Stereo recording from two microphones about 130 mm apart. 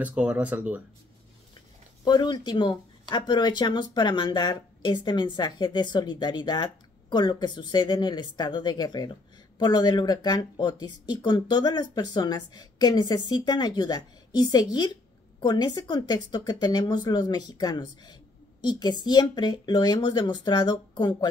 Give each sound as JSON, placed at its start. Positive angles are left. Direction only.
{"t": 0.0, "sound": "speech", "side_deg": -10}
{"t": 2.0, "sound": "speech", "side_deg": 35}